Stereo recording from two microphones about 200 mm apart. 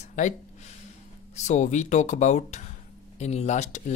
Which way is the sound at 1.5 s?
35° left (ahead or behind).